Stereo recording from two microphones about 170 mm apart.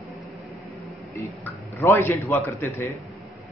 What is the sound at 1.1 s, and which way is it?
A man's voice, 15° left (ahead or behind).